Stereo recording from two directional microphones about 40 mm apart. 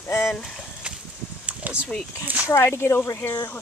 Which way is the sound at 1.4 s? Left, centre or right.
Right.